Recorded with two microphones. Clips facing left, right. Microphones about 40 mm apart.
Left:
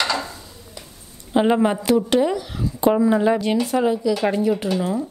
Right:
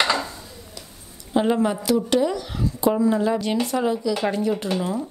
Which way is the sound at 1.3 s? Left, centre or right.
Left.